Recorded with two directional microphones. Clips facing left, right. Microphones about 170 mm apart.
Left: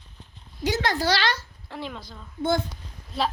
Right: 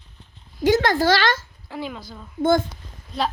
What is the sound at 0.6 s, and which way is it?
Speech, 50° right (ahead or behind).